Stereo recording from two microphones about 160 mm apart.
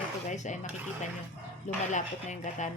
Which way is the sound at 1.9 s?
50° left (ahead or behind).